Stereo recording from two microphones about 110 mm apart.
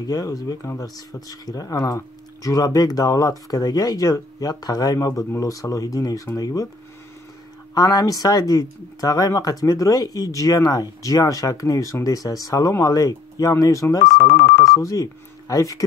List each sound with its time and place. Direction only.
0.0 s speech: 35° left (ahead or behind)
7.7 s speech: 35° left (ahead or behind)